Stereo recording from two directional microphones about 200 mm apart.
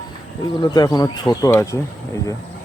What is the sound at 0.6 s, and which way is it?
Speech, 20° left (ahead or behind).